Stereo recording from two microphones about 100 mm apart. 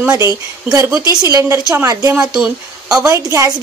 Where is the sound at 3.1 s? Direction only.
30° right (ahead or behind).